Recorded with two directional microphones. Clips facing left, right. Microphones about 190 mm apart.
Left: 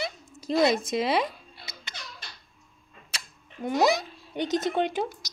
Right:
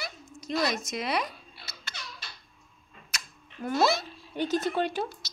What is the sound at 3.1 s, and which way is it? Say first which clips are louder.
A child's voice: even; 20° left (ahead or behind).